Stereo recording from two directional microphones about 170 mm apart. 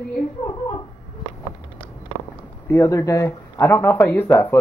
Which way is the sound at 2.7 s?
20° left (ahead or behind).